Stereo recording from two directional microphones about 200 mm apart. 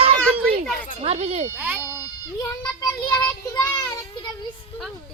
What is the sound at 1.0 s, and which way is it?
Speech, 30° right (ahead or behind).